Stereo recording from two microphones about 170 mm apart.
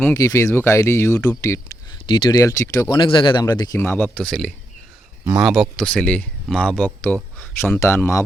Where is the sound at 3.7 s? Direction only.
10° left (ahead or behind).